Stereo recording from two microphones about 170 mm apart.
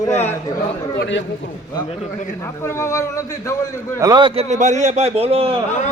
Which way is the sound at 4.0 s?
25° right (ahead or behind).